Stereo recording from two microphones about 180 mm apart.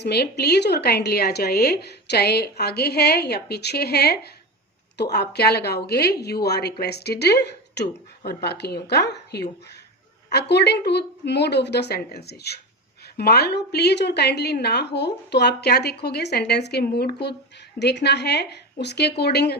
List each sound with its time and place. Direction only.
0.0 s a woman's voice: 65° left (ahead or behind)